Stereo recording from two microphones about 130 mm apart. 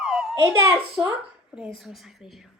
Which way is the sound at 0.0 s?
5° right (ahead or behind).